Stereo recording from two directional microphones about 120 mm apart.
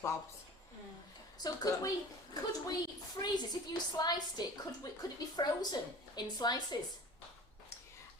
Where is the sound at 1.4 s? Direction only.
30° left (ahead or behind).